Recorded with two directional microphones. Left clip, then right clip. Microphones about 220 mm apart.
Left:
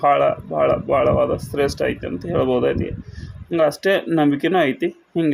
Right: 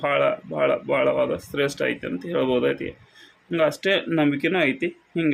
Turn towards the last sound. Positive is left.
turn(degrees=15)  # may be behind; listen again after turning